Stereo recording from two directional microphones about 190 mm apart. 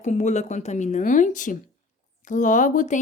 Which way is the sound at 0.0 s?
40° left (ahead or behind).